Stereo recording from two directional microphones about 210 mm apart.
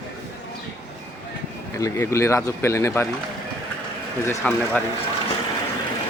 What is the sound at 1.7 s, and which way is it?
Speech, 15° left (ahead or behind).